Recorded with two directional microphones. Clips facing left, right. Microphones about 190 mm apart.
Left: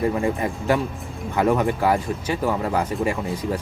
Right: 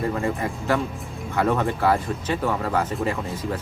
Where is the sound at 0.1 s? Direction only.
15° left (ahead or behind).